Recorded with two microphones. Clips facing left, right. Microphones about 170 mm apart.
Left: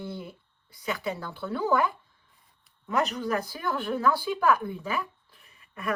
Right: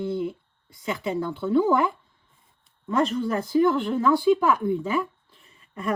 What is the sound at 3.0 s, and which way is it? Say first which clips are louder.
A woman's voice: right 4 dB; 30° right (ahead or behind).